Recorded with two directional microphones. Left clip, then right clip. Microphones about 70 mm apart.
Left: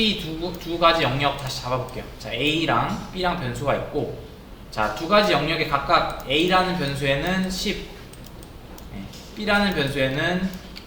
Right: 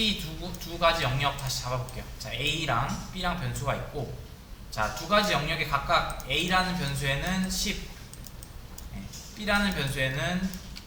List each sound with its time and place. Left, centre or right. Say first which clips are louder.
0.0 s a man's voice: left 6 dB; right
9.4 s a man's voice: left 6 dB; right